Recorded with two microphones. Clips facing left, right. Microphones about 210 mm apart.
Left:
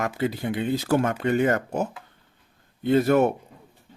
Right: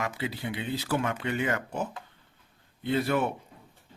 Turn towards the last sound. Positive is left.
turn(degrees=45)  # may be behind; listen again after turning